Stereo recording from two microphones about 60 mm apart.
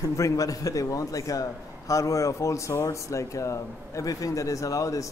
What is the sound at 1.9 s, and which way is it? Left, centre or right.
Speech, left.